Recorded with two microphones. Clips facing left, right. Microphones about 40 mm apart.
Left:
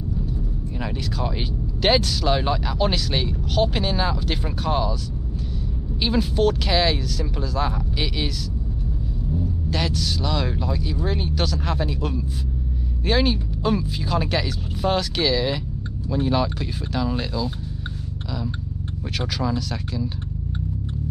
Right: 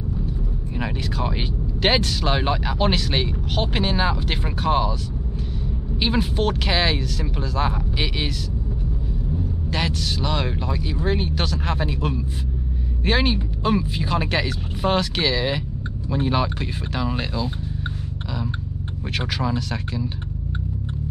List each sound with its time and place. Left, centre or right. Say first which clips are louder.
0.7 s speech: right 2 dB; centre
5.9 s speech: left 1 dB; centre
9.7 s speech: right 1 dB; centre
19.1 s speech: right 1 dB; centre